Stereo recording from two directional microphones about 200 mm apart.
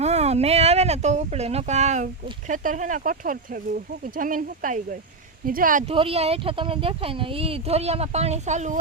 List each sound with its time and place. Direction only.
0.0 s speech: 35° right (ahead or behind)
5.9 s speech: 30° right (ahead or behind)